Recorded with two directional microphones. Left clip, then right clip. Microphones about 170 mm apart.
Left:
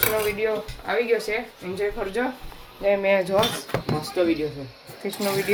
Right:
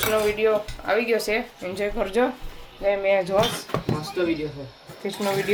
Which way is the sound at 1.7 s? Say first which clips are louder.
Right 3 dB; 40° right (ahead or behind).